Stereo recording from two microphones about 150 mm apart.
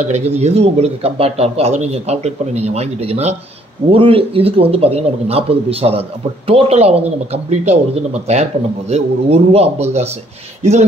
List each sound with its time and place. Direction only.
0.0 s a man's voice: 45° right (ahead or behind)